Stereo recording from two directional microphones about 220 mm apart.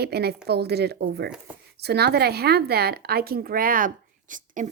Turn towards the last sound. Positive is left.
turn(degrees=-35)  # may be behind; listen again after turning